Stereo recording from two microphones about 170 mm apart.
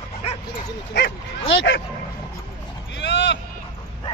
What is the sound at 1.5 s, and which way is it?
Speech, 90° left.